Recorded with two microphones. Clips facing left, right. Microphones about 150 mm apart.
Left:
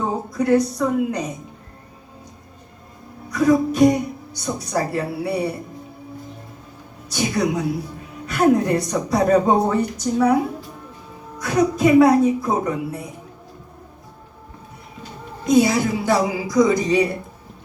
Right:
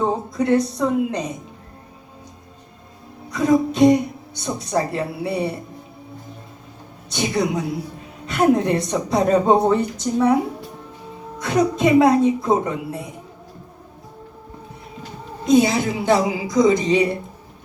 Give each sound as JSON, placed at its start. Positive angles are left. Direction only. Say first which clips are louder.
{"t": 0.0, "sound": "speech", "louder": "right 1 dB", "side_deg": -25}
{"t": 3.2, "sound": "a woman's voice", "louder": "left 1 dB", "side_deg": -25}
{"t": 7.1, "sound": "a woman's voice", "louder": "even", "side_deg": -20}
{"t": 11.3, "sound": "a woman's voice", "louder": "even", "side_deg": -25}
{"t": 15.4, "sound": "a woman's voice", "louder": "even", "side_deg": -25}